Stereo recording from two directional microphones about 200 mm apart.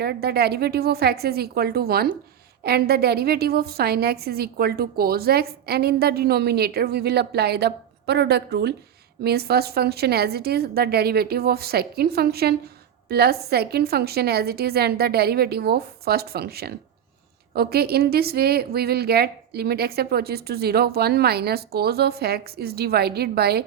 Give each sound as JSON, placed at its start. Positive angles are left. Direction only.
{"t": 0.0, "sound": "a woman's voice", "side_deg": -50}